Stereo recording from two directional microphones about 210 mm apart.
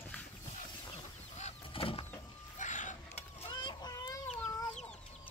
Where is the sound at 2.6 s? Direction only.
35° left (ahead or behind).